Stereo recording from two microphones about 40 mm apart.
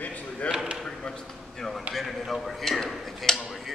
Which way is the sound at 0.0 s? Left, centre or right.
Left.